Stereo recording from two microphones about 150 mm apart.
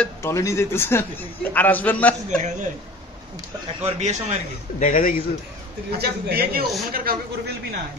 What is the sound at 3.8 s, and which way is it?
Speech, 50° right (ahead or behind).